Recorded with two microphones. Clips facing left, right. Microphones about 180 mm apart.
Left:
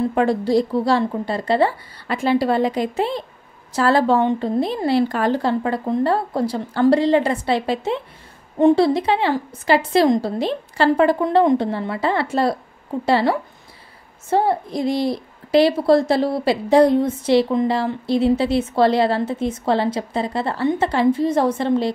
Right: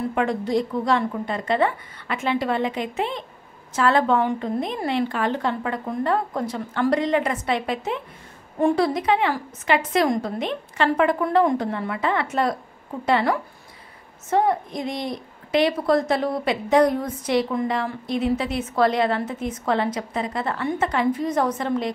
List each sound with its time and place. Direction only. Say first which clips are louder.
0.1 s a woman's voice: left 5 dB; 35° left (ahead or behind)